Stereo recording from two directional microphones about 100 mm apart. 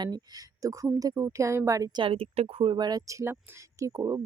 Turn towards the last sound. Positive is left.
turn(degrees=-35)  # may be behind; listen again after turning